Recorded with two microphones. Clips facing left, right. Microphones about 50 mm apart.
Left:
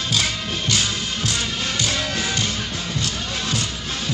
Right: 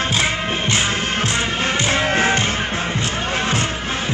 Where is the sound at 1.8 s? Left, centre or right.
Right.